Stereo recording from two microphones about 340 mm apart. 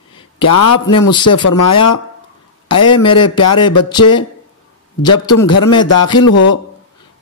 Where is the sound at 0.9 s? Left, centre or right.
Centre.